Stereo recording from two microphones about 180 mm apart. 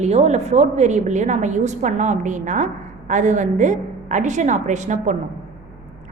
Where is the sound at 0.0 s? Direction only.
35° right (ahead or behind).